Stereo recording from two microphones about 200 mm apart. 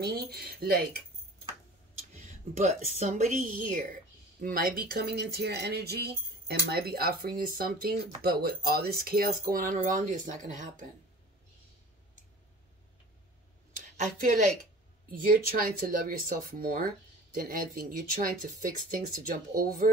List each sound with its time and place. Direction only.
0.0 s speech: 50° right (ahead or behind)
2.1 s a sound: 40° right (ahead or behind)
3.0 s speech: 35° right (ahead or behind)
13.9 s a woman's voice: 40° right (ahead or behind)
19.5 s speech: 45° right (ahead or behind)